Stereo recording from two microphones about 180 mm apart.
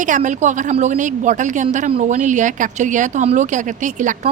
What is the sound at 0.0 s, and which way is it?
Speech, 45° right (ahead or behind).